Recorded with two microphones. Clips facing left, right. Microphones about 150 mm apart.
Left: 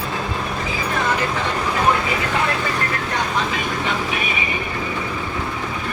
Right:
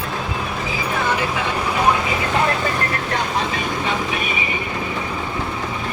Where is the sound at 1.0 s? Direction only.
10° right (ahead or behind).